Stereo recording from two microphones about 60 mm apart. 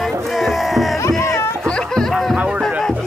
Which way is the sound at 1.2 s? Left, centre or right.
Left.